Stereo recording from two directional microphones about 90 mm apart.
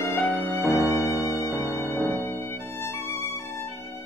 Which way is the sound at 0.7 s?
35° left (ahead or behind).